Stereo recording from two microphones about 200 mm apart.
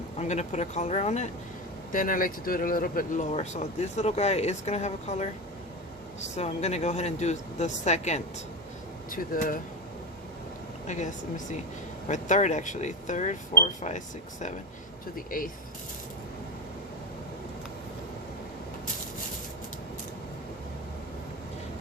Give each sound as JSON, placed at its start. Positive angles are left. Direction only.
{"t": 0.2, "sound": "speech", "side_deg": 35}
{"t": 6.3, "sound": "speech", "side_deg": 35}
{"t": 10.8, "sound": "speech", "side_deg": 35}
{"t": 15.1, "sound": "speech", "side_deg": 45}